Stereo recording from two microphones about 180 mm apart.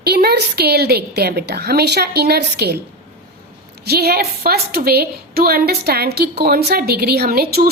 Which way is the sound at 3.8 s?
60° right (ahead or behind).